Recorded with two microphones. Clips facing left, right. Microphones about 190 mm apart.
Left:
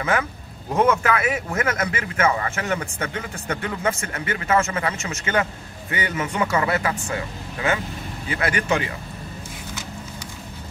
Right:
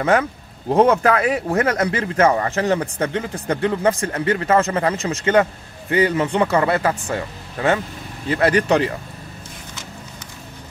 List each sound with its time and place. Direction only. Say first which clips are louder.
0.0 s speech: right 6 dB; 35° right (ahead or behind)
8.3 s speech: right 7 dB; 35° right (ahead or behind)